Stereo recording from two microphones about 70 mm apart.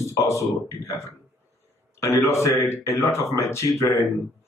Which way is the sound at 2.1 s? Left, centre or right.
Left.